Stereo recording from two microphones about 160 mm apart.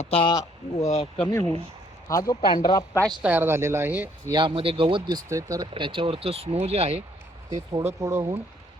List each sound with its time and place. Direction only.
0.0 s speech: 35° left (ahead or behind)
3.2 s speech: 10° right (ahead or behind)
4.3 s speech: 30° right (ahead or behind)
7.5 s speech: 20° right (ahead or behind)